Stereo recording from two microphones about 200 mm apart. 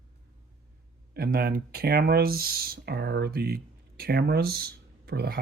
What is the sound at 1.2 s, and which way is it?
Speech, 50° right (ahead or behind).